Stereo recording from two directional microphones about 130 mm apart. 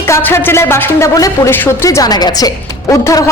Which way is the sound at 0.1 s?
15° left (ahead or behind).